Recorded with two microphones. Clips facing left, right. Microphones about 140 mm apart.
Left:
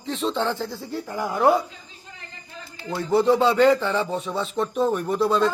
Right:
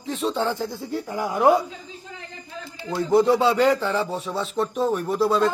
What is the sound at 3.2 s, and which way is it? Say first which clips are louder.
Speech: left 1 dB; 10° right (ahead or behind).